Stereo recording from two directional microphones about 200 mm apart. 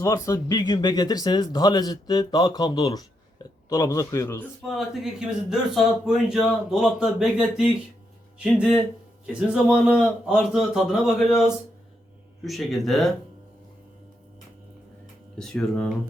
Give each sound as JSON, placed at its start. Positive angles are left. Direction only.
{"t": 0.0, "sound": "speech", "side_deg": 15}
{"t": 4.6, "sound": "a man's voice", "side_deg": 0}
{"t": 12.5, "sound": "a man's voice", "side_deg": 0}
{"t": 15.4, "sound": "a man's voice", "side_deg": 5}